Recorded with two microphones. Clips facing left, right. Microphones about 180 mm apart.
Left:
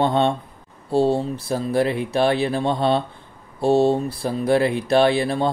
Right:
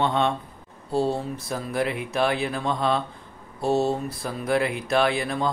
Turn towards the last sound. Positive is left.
turn(degrees=35)  # may be behind; listen again after turning